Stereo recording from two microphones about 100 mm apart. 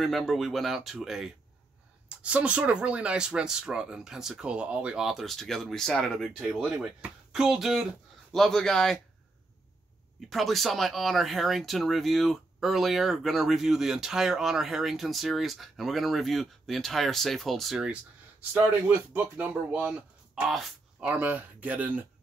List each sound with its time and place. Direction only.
0.0 s speech: centre (ahead or behind)
10.2 s speech: centre (ahead or behind)
18.5 s speech: 15° right (ahead or behind)